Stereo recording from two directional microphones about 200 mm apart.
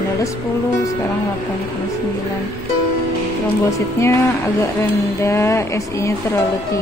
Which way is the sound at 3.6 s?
15° left (ahead or behind).